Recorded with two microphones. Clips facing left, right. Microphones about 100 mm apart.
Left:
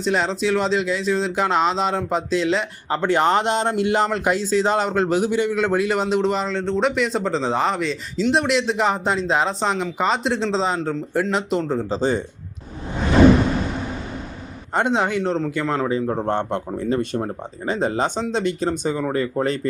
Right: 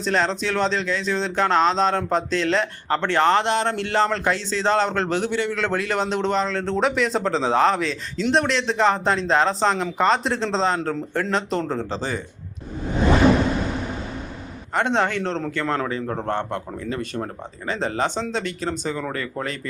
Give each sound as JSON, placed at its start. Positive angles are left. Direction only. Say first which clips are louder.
{"t": 0.0, "sound": "speech", "louder": "left 1 dB", "side_deg": 5}
{"t": 11.9, "sound": "speech", "louder": "left 6 dB", "side_deg": 20}
{"t": 14.8, "sound": "speech", "louder": "left 2 dB", "side_deg": 10}